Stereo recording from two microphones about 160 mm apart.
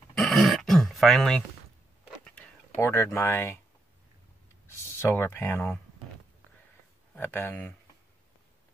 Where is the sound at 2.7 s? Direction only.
15° left (ahead or behind).